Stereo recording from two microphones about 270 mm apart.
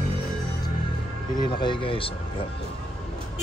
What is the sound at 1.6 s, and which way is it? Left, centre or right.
Speech, centre.